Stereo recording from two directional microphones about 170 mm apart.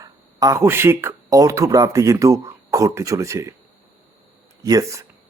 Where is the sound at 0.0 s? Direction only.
20° right (ahead or behind).